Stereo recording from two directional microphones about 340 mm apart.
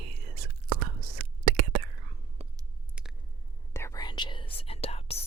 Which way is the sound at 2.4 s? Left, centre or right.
Centre.